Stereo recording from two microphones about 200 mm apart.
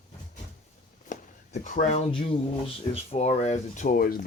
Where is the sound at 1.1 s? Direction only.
40° left (ahead or behind).